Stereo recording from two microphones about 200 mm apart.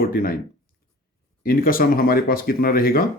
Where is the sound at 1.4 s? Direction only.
45° left (ahead or behind).